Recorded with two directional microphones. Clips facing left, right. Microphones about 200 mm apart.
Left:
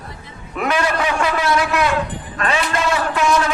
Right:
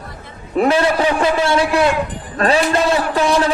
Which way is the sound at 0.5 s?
30° right (ahead or behind).